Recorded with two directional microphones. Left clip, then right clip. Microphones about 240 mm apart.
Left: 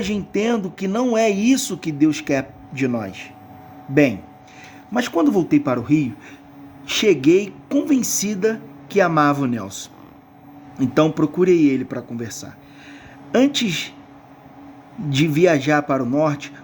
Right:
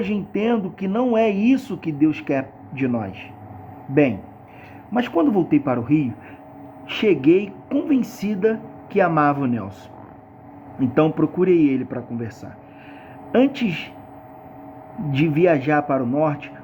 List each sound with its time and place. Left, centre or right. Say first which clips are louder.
0.0 s speech: left 1 dB; left
4.9 s speech: left 1 dB; left
15.1 s speech: left 1 dB; left